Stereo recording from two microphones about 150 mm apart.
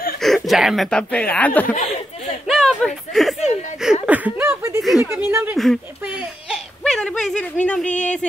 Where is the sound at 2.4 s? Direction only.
Centre (ahead or behind).